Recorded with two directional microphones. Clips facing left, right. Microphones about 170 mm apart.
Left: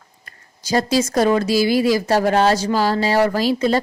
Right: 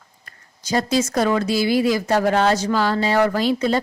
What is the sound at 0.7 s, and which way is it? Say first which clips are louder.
Speech: left 2 dB; 35° left (ahead or behind).